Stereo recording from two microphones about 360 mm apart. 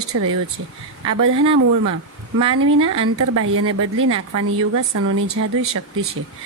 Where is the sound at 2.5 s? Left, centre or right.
Right.